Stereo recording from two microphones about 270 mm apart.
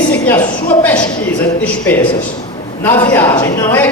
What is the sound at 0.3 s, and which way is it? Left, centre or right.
Speech, centre.